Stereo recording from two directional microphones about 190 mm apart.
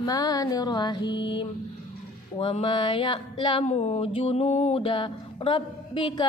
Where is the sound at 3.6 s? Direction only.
35° left (ahead or behind).